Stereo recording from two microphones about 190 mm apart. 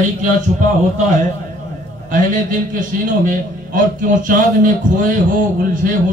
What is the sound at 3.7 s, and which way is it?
Speech, 45° right (ahead or behind).